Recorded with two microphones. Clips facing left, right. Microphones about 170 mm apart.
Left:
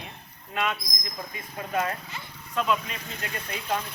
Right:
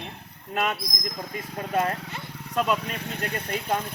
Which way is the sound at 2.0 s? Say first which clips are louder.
Right 4 dB; 75° right (ahead or behind).